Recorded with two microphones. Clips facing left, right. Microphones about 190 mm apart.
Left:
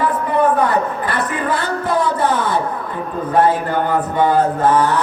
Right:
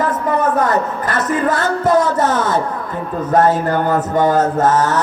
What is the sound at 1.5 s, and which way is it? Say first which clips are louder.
Music: right 5 dB; 45° right (ahead or behind).